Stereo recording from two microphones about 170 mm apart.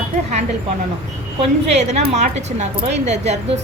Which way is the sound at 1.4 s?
40° right (ahead or behind).